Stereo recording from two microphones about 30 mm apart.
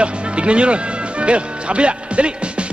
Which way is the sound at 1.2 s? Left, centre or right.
Right.